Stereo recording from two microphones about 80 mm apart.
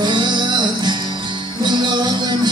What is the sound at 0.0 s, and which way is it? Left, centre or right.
Music, right.